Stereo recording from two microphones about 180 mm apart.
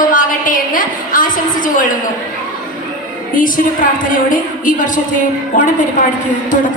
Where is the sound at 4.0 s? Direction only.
45° left (ahead or behind).